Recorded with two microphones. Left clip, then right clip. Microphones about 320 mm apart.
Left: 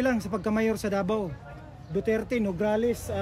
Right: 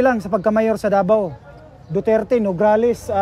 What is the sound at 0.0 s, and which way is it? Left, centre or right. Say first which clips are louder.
Speech: right 11 dB; centre.